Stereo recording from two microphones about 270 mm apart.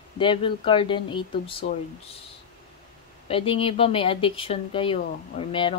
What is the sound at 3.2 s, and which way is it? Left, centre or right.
Speech, centre.